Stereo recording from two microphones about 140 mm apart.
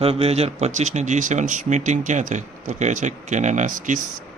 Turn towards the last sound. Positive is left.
turn(degrees=-70)  # may be behind; listen again after turning